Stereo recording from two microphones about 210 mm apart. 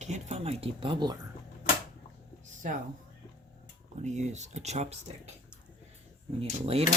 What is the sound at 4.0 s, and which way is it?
Speech, 35° right (ahead or behind).